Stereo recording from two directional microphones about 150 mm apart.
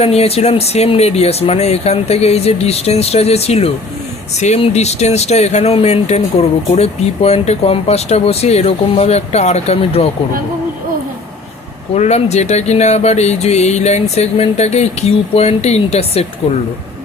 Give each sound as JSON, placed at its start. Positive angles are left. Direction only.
{"t": 0.0, "sound": "speech", "side_deg": 45}
{"t": 11.9, "sound": "speech", "side_deg": 45}